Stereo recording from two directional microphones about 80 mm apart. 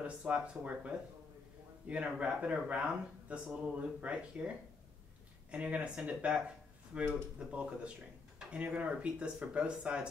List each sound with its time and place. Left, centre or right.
0.0 s speech: centre
5.5 s speech: centre